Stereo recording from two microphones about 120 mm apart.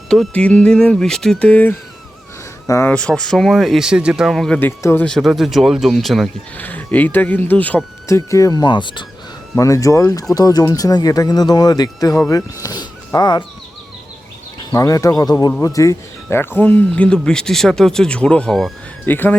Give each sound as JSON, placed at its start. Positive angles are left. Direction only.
{"t": 0.1, "sound": "speech", "side_deg": 5}
{"t": 2.6, "sound": "speech", "side_deg": 25}
{"t": 2.9, "sound": "speech", "side_deg": 10}
{"t": 4.6, "sound": "speech", "side_deg": 20}
{"t": 5.0, "sound": "speech", "side_deg": 0}
{"t": 6.6, "sound": "speech", "side_deg": 15}
{"t": 8.0, "sound": "speech", "side_deg": 25}
{"t": 9.6, "sound": "speech", "side_deg": 25}
{"t": 14.7, "sound": "speech", "side_deg": 30}
{"t": 19.0, "sound": "speech", "side_deg": 15}